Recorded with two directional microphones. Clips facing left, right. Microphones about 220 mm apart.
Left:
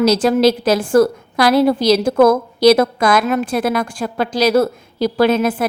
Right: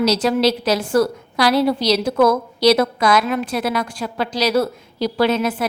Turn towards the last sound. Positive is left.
turn(degrees=50)  # may be behind; listen again after turning